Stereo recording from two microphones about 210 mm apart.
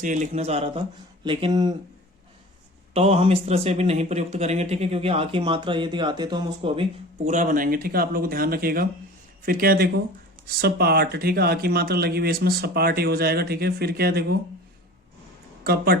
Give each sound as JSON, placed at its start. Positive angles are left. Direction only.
{"t": 0.0, "sound": "a man's voice", "side_deg": -35}
{"t": 2.9, "sound": "speech", "side_deg": -30}
{"t": 7.3, "sound": "speech", "side_deg": -35}
{"t": 15.6, "sound": "speech", "side_deg": -45}